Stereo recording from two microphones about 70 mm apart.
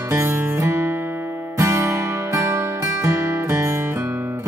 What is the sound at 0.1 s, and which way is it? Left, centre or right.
Music, right.